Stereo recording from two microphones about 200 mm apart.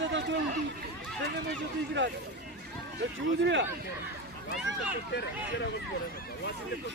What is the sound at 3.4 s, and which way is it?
Speech, 65° right (ahead or behind).